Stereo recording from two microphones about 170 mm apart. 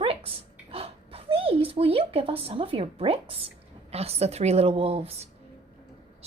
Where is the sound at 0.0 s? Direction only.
35° right (ahead or behind).